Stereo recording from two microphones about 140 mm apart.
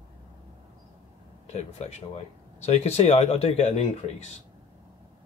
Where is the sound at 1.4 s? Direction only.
50° left (ahead or behind).